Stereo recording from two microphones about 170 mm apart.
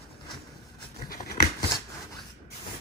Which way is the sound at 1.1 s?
60° left (ahead or behind).